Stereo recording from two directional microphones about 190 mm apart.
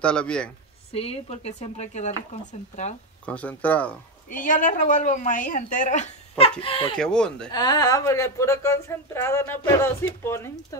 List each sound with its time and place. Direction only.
0.0 s speech: 5° left (ahead or behind)
0.9 s speech: 30° left (ahead or behind)
3.3 s speech: 5° left (ahead or behind)
4.3 s a woman's voice: 45° left (ahead or behind); by 7.0 s 25° left (ahead or behind)
7.0 s speech: 5° left (ahead or behind)
7.5 s speech: 20° left (ahead or behind)